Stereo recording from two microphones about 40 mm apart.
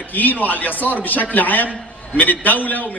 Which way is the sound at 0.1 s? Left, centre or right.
Left.